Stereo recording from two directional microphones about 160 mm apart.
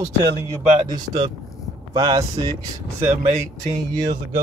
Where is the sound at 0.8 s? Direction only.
25° right (ahead or behind).